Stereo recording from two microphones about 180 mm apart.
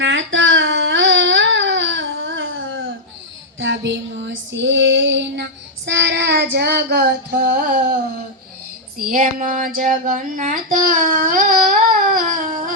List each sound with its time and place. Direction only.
0.0 s baby cry: 90° right
3.6 s female singing: 90° right; by 7.9 s 60° right (ahead or behind)
9.0 s child singing: 50° right (ahead or behind)